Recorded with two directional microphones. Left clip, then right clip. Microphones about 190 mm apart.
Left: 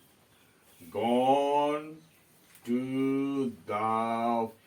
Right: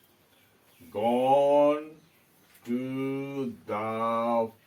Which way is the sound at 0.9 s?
Centre (ahead or behind).